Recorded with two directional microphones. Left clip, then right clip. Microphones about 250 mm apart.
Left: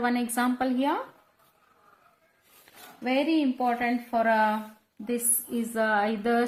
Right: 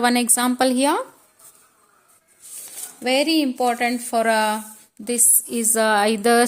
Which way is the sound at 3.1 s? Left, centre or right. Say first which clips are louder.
Right 6 dB; right.